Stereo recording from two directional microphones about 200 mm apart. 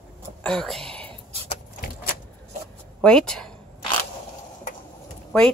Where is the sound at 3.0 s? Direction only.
5° left (ahead or behind).